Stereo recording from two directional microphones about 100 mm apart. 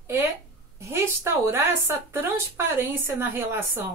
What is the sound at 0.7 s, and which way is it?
Speech, 30° right (ahead or behind).